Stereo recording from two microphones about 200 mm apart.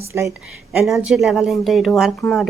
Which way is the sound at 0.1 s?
15° right (ahead or behind).